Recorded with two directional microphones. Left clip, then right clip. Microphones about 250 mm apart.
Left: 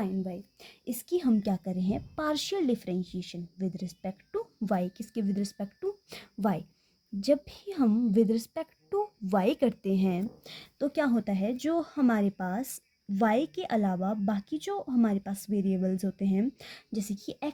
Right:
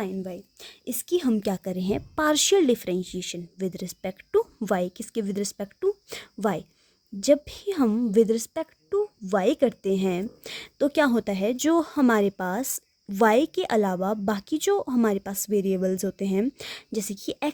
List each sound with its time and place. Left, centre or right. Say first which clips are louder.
0.0 s a woman's voice: right 3 dB; right